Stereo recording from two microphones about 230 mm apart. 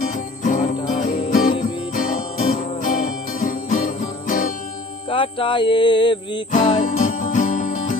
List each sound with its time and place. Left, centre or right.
0.0 s music: left
5.0 s music: left
6.7 s music: left